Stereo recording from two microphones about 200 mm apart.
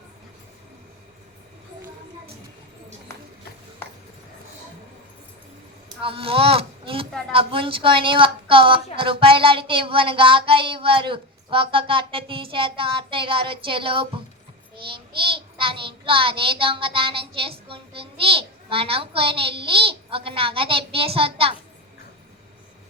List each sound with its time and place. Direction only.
6.0 s a child's voice: 25° right (ahead or behind)